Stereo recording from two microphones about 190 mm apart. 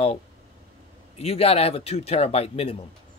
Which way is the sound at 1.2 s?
30° left (ahead or behind).